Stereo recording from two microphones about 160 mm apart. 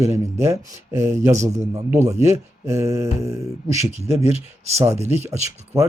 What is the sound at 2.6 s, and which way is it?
Speech, 20° right (ahead or behind).